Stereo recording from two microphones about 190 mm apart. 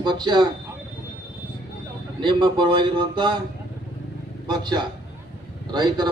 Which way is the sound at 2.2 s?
25° right (ahead or behind).